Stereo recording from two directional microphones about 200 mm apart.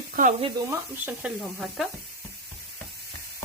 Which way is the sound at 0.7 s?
10° right (ahead or behind).